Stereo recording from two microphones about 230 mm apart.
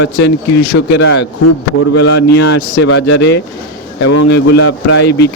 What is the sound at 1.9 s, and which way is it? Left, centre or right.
Speech, left.